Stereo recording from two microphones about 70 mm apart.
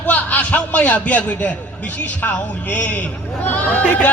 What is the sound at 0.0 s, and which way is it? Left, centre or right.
A man's voice, left.